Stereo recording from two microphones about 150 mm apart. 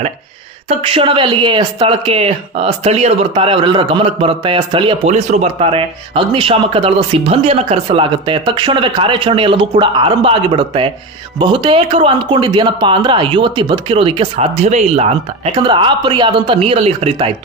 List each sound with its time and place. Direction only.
0.7 s speech: 35° right (ahead or behind)
15.6 s speech: 30° right (ahead or behind)